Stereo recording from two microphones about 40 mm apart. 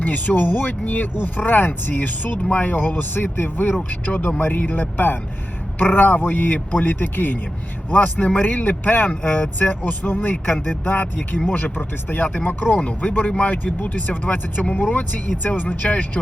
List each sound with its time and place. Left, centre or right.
0.0 s speech: left
3.3 s speech: left
3.8 s speech: left
7.9 s speech: left